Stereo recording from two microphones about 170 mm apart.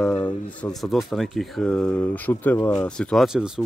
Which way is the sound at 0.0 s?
5° left (ahead or behind).